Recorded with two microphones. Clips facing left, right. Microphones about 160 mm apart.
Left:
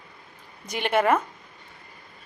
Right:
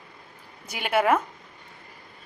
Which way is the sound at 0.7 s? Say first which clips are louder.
Left 1 dB; 5° right (ahead or behind).